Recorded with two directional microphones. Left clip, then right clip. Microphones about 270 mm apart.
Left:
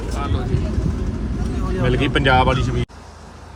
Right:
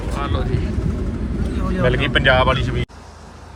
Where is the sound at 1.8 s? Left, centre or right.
Left.